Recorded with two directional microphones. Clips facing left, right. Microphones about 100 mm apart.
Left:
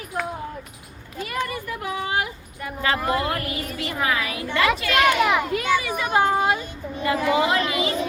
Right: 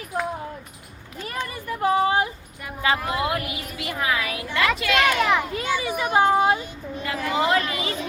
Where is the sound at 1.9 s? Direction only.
35° right (ahead or behind).